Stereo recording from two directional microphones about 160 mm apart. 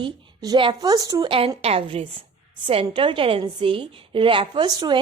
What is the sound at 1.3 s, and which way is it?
A woman's voice, 35° right (ahead or behind).